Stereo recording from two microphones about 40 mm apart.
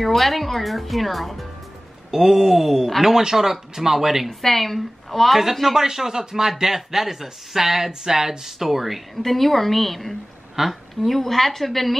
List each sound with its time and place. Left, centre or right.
0.0 s speech: centre
2.0 s speech: centre
4.3 s speech: centre
5.9 s speech: centre